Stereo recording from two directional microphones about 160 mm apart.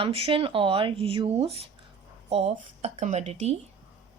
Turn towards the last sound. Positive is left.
turn(degrees=-45)  # may be behind; listen again after turning